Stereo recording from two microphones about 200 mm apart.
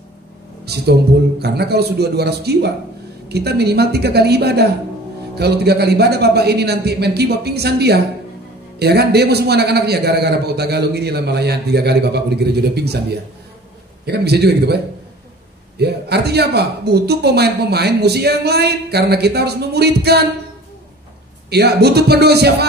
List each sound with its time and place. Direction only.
0.7 s a man's voice: 55° right (ahead or behind)
14.0 s a man's voice: 55° right (ahead or behind)
15.8 s a man's voice: 55° right (ahead or behind)
21.5 s a man's voice: 55° right (ahead or behind)